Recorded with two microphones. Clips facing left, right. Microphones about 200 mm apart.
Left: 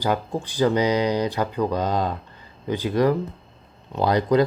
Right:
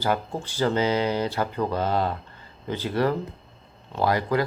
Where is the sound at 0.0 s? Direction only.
15° left (ahead or behind).